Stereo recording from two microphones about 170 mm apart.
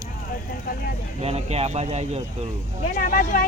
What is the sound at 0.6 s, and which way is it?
Speech, 55° left (ahead or behind).